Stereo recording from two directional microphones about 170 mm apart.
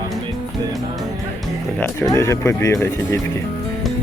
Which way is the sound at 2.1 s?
15° left (ahead or behind).